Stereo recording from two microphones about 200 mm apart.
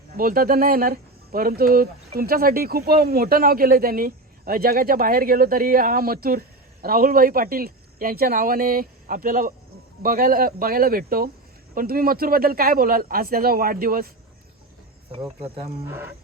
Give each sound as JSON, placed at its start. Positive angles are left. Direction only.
{"t": 0.2, "sound": "speech", "side_deg": -45}
{"t": 15.6, "sound": "speech", "side_deg": -10}